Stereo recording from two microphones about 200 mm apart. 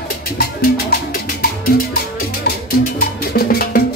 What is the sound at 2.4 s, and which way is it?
Music, 50° left (ahead or behind).